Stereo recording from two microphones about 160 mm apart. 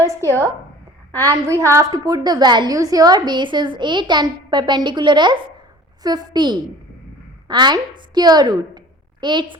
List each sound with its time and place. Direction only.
1.2 s a woman's voice: 20° right (ahead or behind)